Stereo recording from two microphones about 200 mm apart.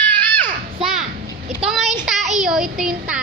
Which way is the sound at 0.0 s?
10° left (ahead or behind).